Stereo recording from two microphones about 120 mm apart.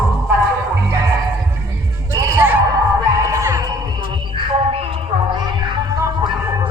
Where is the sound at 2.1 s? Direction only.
25° right (ahead or behind).